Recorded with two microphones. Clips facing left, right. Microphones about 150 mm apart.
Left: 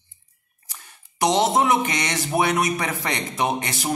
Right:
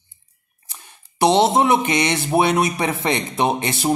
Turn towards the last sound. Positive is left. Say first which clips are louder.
# right 4 dB
turn(degrees=-30)  # may be behind; listen again after turning